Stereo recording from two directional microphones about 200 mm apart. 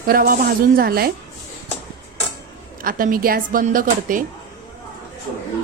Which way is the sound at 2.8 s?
45° right (ahead or behind).